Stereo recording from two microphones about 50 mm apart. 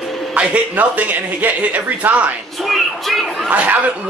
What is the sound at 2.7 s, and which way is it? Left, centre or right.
Speech, centre.